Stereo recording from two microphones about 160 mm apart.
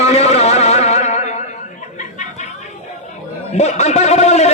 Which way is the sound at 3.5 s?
45° left (ahead or behind).